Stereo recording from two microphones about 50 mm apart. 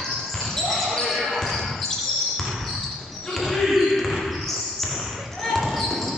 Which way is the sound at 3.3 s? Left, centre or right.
Centre.